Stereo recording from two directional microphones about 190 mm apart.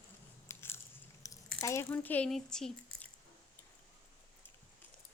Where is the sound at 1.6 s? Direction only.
15° left (ahead or behind).